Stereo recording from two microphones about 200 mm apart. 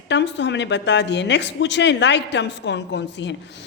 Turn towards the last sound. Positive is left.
turn(degrees=60)  # may be behind; listen again after turning